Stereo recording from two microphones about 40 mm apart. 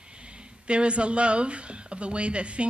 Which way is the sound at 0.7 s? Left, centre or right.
Right.